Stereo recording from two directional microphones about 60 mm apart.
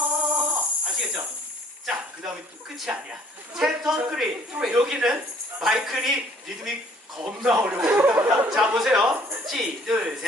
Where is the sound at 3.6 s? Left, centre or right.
Centre.